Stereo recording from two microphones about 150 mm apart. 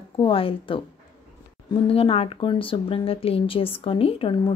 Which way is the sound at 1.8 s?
40° left (ahead or behind).